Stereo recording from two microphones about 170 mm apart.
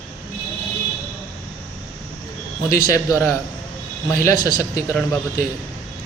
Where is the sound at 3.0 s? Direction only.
20° left (ahead or behind).